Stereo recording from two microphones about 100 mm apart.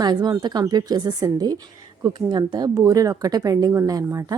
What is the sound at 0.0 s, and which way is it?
A woman's voice, 45° right (ahead or behind).